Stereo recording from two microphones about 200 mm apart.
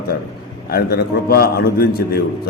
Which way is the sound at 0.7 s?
50° left (ahead or behind).